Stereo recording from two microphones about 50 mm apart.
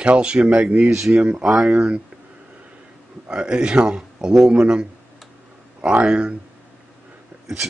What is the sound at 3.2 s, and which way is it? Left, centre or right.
Speech, centre.